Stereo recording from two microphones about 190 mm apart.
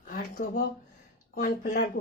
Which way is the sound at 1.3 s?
50° left (ahead or behind).